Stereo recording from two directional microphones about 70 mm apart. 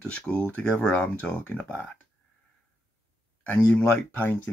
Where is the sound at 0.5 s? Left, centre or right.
Left.